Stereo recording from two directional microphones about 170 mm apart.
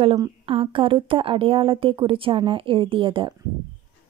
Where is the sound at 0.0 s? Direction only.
30° right (ahead or behind).